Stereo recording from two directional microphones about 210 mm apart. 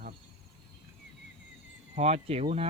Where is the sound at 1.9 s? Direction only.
30° right (ahead or behind).